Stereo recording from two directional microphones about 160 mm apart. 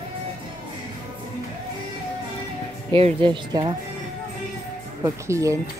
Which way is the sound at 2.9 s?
35° right (ahead or behind).